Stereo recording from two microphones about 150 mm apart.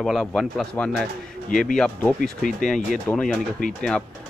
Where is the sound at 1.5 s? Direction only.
60° left (ahead or behind).